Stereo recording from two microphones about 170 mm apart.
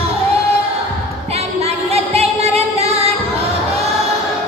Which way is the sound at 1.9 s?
35° right (ahead or behind).